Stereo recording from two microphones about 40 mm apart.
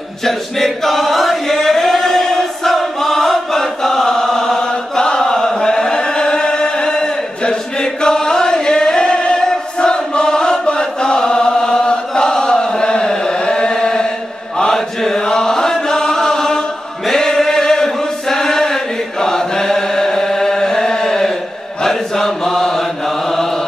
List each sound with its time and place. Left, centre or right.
0.2 s chant: centre
21.8 s mantra: centre